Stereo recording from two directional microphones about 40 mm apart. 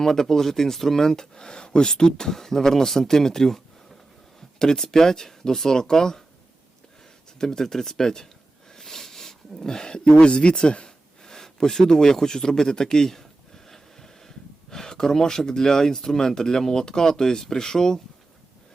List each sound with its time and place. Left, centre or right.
0.0 s speech: centre
7.3 s speech: centre
11.2 s speech: centre